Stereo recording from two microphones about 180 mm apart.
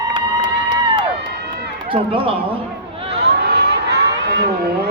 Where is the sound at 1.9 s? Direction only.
30° right (ahead or behind).